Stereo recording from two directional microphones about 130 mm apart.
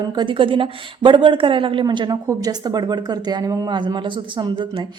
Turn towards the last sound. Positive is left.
turn(degrees=-35)  # may be behind; listen again after turning